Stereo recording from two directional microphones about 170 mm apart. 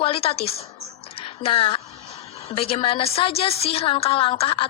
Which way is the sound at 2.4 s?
35° left (ahead or behind).